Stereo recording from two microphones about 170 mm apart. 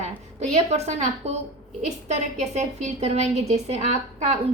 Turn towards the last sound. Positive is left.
turn(degrees=-40)  # may be behind; listen again after turning